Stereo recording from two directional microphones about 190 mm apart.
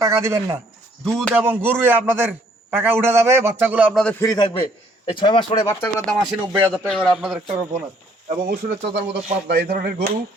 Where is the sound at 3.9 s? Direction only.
5° left (ahead or behind).